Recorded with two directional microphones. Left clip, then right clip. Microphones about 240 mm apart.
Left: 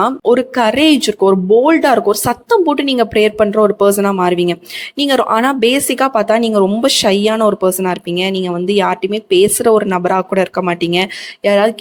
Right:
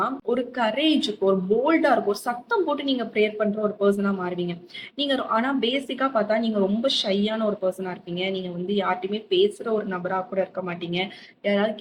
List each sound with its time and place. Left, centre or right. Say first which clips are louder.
0.0 s speech: left 13 dB; left